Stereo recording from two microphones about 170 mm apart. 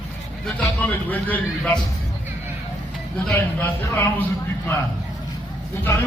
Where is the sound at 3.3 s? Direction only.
15° left (ahead or behind).